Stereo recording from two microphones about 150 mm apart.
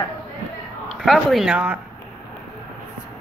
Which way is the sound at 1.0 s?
Centre (ahead or behind).